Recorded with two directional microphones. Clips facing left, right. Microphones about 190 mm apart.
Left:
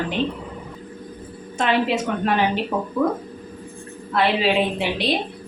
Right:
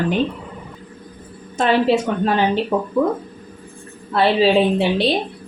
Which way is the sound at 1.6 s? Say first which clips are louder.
Right 4 dB; 35° right (ahead or behind).